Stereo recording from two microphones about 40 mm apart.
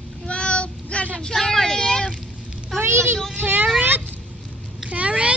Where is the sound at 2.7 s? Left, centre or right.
Right.